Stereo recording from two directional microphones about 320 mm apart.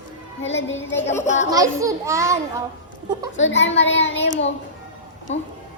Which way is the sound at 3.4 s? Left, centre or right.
Left.